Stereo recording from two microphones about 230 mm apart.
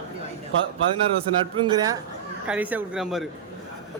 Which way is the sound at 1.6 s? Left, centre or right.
Centre.